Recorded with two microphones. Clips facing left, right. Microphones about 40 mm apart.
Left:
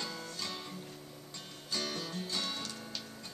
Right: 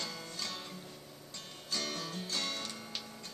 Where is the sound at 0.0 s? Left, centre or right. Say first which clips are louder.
Left 1 dB; centre.